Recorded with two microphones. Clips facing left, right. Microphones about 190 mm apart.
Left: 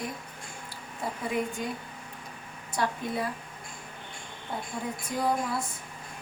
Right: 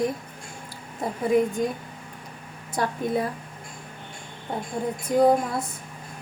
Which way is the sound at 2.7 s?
50° right (ahead or behind).